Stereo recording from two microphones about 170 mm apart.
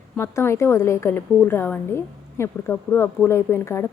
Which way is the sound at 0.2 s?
15° left (ahead or behind).